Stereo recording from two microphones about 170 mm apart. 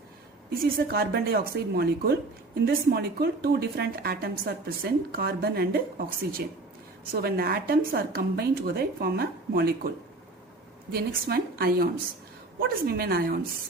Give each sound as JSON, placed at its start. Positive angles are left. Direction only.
{"t": 0.5, "sound": "a woman's voice", "side_deg": -60}
{"t": 10.9, "sound": "a woman's voice", "side_deg": -65}